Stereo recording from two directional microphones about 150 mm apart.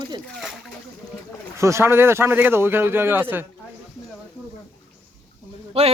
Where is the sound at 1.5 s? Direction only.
20° right (ahead or behind).